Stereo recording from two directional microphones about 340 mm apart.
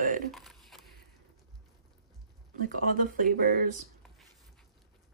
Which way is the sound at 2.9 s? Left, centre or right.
Right.